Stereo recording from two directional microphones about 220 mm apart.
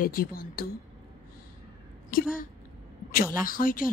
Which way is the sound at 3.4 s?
40° left (ahead or behind).